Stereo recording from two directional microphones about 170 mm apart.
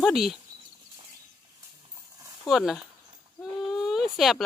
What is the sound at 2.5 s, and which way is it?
Speech, centre (ahead or behind).